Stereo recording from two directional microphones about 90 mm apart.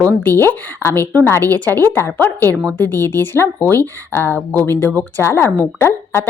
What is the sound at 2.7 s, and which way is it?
Speech, 25° left (ahead or behind).